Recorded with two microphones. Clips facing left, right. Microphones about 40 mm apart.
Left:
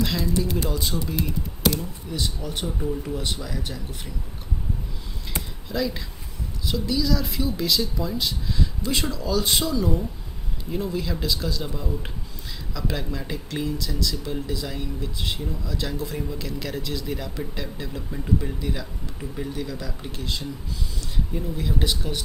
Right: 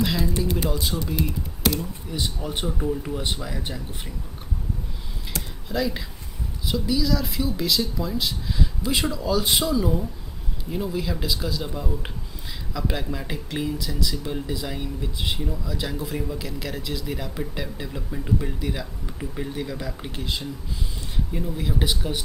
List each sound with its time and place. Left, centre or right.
0.0 s speech: centre
2.8 s speech: centre
3.2 s speech: centre
5.6 s speech: centre